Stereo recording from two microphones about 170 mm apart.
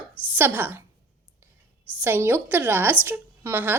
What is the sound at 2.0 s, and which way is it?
A woman's voice, 15° right (ahead or behind).